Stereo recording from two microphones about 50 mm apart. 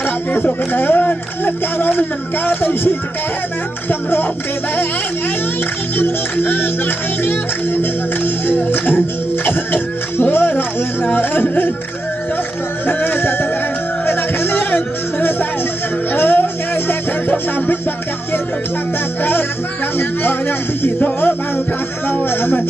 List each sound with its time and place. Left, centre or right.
0.0 s a sound: left
0.5 s speech: left
5.9 s music: left
12.8 s music: left
16.1 s speech: left
20.0 s speech: left
22.1 s speech: left